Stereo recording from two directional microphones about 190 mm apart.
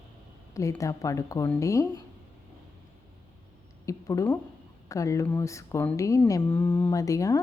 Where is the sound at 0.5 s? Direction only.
15° left (ahead or behind).